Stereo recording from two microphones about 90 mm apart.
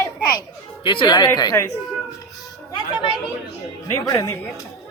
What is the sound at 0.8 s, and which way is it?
Speech, 65° left (ahead or behind).